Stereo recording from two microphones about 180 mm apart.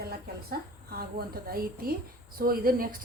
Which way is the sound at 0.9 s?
55° right (ahead or behind).